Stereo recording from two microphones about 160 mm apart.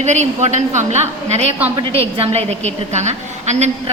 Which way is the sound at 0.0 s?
45° right (ahead or behind).